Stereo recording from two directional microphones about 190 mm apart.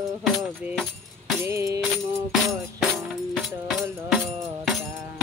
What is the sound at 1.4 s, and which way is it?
Music, 15° right (ahead or behind).